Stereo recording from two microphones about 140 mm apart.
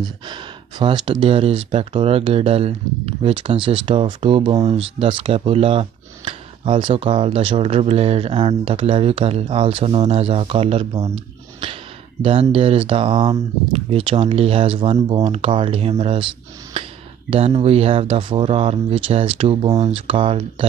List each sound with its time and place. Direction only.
0.0 s speech: 30° right (ahead or behind)
16.8 s a sound: 40° right (ahead or behind)
17.3 s speech: 45° right (ahead or behind)